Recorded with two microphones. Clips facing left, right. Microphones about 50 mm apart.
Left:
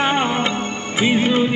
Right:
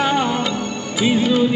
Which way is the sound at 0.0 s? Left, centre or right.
Left.